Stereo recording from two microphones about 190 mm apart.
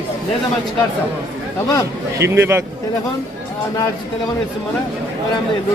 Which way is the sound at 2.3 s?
10° right (ahead or behind).